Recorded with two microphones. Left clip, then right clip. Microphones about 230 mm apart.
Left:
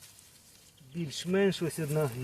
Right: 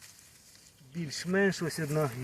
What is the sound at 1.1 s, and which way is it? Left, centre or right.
Speech, centre.